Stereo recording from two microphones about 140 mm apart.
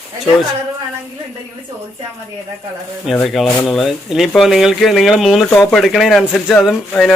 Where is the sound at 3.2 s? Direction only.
Centre (ahead or behind).